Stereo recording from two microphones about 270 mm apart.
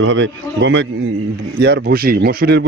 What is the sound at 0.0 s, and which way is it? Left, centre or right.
Speech, right.